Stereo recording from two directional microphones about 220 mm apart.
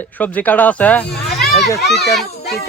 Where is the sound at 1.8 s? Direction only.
50° left (ahead or behind).